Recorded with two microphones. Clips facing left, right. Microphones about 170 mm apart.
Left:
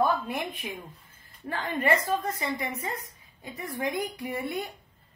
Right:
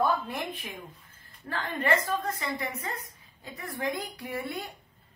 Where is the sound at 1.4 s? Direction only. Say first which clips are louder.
Left 2 dB; 20° left (ahead or behind).